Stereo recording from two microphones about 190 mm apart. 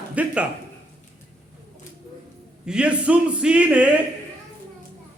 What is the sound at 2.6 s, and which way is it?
A man's voice, 5° right (ahead or behind).